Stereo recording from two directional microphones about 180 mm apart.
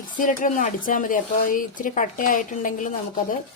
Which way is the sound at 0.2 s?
45° left (ahead or behind).